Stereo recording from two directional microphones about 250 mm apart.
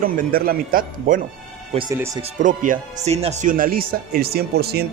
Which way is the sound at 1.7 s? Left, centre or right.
Centre.